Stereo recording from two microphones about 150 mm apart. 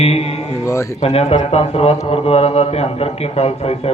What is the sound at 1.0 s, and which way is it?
A man's voice, 45° left (ahead or behind).